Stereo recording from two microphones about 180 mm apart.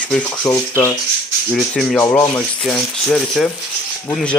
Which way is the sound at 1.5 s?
Centre (ahead or behind).